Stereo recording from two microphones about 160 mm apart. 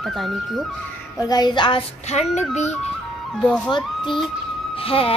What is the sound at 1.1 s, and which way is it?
Speech, 25° left (ahead or behind).